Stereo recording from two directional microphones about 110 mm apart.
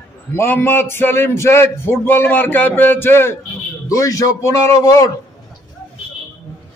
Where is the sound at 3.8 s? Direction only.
30° left (ahead or behind).